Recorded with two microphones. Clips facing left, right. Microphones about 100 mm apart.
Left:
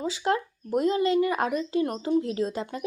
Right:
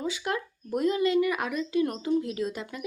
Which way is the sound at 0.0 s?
30° left (ahead or behind).